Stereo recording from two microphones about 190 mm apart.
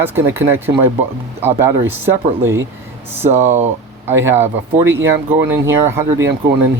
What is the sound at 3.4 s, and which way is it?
Speech, 35° right (ahead or behind).